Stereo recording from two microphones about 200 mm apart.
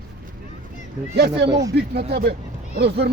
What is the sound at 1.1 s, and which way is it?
A man's voice, 50° right (ahead or behind).